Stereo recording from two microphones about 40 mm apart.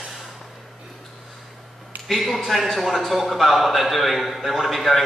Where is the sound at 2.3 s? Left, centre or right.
Centre.